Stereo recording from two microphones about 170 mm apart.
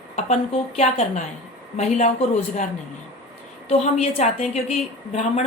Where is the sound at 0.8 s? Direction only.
40° left (ahead or behind).